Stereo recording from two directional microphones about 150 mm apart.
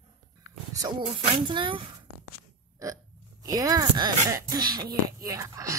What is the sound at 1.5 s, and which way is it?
Speech, 35° right (ahead or behind).